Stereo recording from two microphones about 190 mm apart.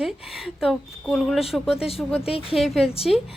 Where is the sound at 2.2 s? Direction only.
30° left (ahead or behind).